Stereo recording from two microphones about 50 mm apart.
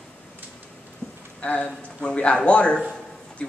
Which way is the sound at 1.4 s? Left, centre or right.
Left.